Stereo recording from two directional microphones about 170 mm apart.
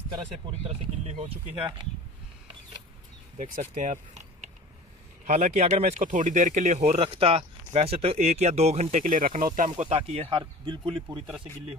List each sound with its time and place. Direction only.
0.7 s speech: 35° right (ahead or behind)
3.3 s speech: 45° right (ahead or behind); by 11.2 s 25° right (ahead or behind)